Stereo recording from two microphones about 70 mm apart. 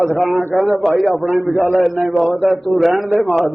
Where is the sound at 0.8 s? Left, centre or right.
Centre.